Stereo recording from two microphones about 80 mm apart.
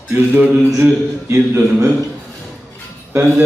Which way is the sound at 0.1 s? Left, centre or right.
Right.